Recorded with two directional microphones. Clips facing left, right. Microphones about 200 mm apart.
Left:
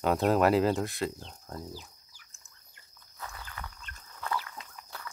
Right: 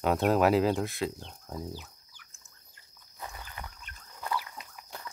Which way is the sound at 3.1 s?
20° right (ahead or behind).